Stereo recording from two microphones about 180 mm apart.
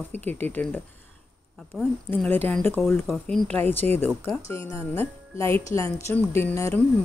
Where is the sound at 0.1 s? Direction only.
10° left (ahead or behind).